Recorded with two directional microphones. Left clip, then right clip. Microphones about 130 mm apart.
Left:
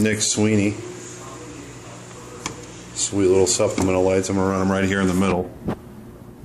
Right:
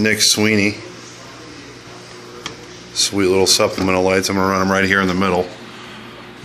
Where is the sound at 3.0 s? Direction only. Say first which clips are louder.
Right 2 dB; 5° right (ahead or behind).